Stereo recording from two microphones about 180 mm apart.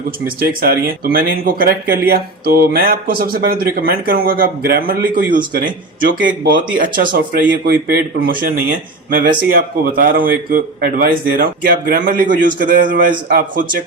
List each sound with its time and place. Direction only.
0.3 s a man's voice: 55° right (ahead or behind)